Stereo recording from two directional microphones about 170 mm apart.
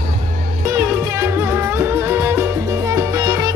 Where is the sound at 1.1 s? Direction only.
15° right (ahead or behind).